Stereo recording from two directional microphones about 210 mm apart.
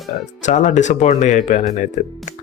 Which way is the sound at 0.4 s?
35° left (ahead or behind).